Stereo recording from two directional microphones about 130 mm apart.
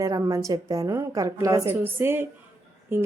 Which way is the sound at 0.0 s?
25° right (ahead or behind).